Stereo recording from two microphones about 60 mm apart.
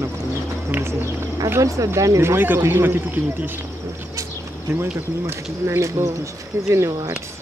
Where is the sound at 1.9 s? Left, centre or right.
Right.